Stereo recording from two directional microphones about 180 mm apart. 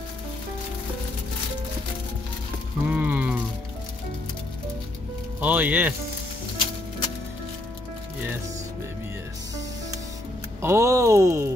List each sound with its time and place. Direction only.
2.8 s a sound: 5° right (ahead or behind)
5.4 s speech: 10° right (ahead or behind)
10.6 s speech: 15° right (ahead or behind)